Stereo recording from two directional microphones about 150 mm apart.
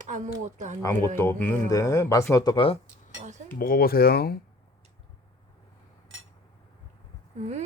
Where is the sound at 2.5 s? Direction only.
40° left (ahead or behind).